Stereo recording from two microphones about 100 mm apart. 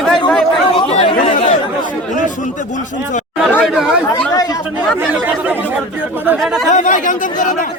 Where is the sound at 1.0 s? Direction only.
70° left (ahead or behind).